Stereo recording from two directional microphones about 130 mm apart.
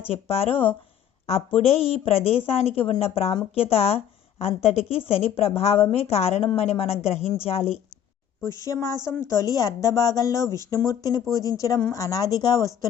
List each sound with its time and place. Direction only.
0.1 s a woman's voice: 50° left (ahead or behind)
0.5 s speech: 15° left (ahead or behind)
1.5 s a woman's voice: 50° left (ahead or behind)
8.4 s speech: 25° left (ahead or behind)